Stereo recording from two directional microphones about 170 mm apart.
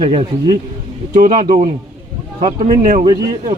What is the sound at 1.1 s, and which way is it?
Speech, 55° right (ahead or behind).